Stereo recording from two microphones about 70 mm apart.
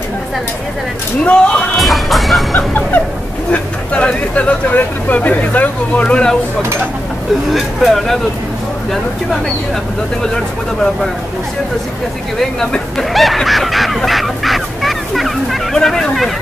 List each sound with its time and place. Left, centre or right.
1.2 s speech: centre
1.8 s speech: centre
2.5 s speech: left
7.5 s speech: centre
10.2 s speech: centre
12.4 s speech: centre